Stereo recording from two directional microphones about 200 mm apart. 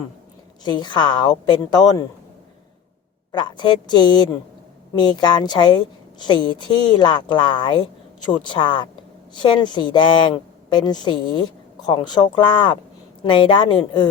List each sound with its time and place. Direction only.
0.6 s a woman's voice: 20° left (ahead or behind)
3.3 s a woman's voice: 20° left (ahead or behind)